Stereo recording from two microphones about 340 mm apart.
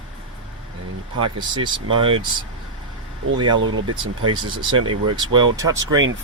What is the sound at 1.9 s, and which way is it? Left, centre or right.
Speech, centre.